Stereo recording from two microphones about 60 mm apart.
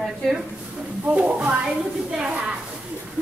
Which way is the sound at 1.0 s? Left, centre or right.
Right.